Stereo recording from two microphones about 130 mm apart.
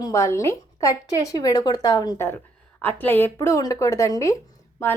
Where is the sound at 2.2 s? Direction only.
15° left (ahead or behind).